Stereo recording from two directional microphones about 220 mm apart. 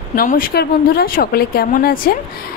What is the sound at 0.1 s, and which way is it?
A woman's voice, 40° left (ahead or behind).